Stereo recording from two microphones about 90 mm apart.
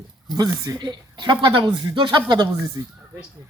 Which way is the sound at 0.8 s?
55° right (ahead or behind).